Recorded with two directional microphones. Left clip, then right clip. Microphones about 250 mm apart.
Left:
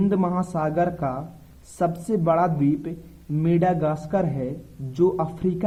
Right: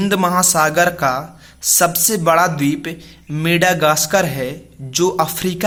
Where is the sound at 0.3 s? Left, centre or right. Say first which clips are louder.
Right 10 dB; centre.